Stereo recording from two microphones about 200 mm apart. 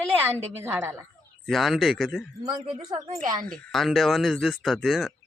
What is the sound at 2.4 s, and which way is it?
Speech, 25° right (ahead or behind).